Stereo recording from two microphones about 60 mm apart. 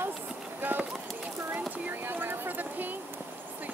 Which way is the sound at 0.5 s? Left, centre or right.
Right.